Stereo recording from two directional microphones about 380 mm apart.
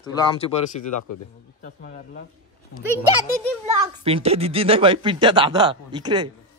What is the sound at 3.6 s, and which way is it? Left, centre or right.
A child's voice, centre.